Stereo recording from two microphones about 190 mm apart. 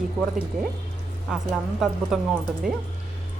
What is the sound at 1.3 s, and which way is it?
Speech, centre (ahead or behind).